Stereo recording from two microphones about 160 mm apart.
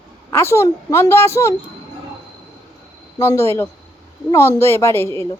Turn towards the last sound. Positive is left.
turn(degrees=15)  # may be behind; listen again after turning